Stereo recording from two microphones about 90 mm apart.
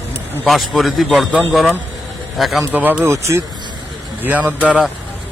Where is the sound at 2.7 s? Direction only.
20° right (ahead or behind).